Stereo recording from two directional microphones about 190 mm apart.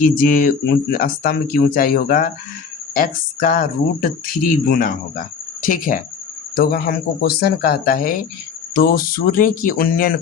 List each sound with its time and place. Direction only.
0.0 s speech: 45° left (ahead or behind)
4.7 s speech: 45° left (ahead or behind)